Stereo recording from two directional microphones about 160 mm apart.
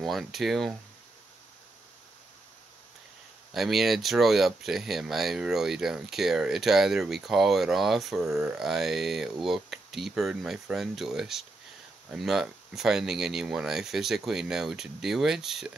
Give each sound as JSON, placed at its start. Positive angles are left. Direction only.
{"t": 0.0, "sound": "speech", "side_deg": 0}
{"t": 3.5, "sound": "speech", "side_deg": 0}